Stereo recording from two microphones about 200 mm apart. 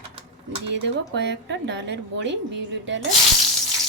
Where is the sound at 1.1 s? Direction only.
60° right (ahead or behind).